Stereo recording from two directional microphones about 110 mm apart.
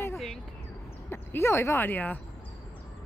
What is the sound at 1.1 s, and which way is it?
Speech, 20° left (ahead or behind).